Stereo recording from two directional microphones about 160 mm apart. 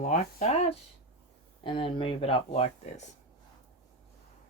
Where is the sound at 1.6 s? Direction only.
35° left (ahead or behind).